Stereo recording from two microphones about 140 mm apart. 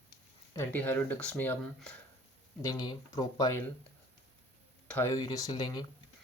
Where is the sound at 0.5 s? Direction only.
15° left (ahead or behind).